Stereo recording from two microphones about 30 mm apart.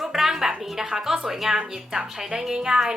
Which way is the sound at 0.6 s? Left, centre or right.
Centre.